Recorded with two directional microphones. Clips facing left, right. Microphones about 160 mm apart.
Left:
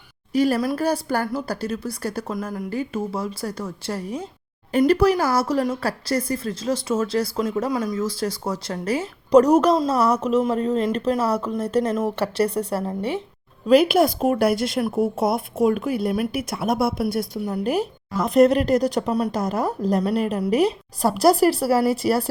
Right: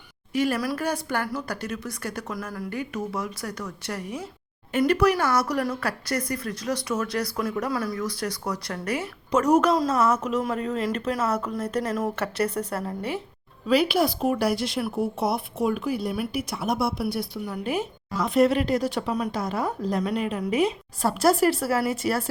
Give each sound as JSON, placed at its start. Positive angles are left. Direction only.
{"t": 0.3, "sound": "a woman's voice", "side_deg": 35}
{"t": 13.7, "sound": "speech", "side_deg": 50}